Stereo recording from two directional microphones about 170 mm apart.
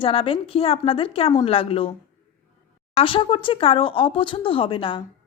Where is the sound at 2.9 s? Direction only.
30° left (ahead or behind).